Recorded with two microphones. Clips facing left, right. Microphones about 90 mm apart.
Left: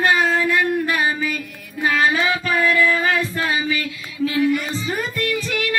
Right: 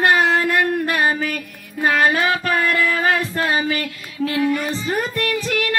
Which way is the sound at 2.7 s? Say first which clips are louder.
Even; 45° right (ahead or behind).